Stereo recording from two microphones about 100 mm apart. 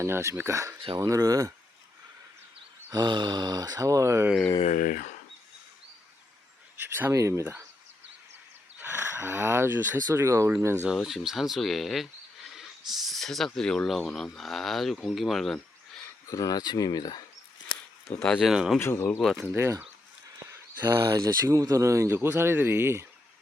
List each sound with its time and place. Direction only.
0.0 s speech: 30° right (ahead or behind)
2.9 s speech: 45° right (ahead or behind); by 4.3 s 30° right (ahead or behind)
6.9 s speech: 20° right (ahead or behind)
8.8 s speech: 20° right (ahead or behind)
10.1 s speech: 30° right (ahead or behind)
10.9 s speech: 5° right (ahead or behind)
16.2 s speech: 35° left (ahead or behind)
18.3 s speech: 5° right (ahead or behind)
18.8 s speech: 25° left (ahead or behind)
19.2 s speech: centre (ahead or behind)
19.5 s speech: 25° right (ahead or behind)
20.5 s a sound: 25° right (ahead or behind)
21.1 s speech: 35° right (ahead or behind)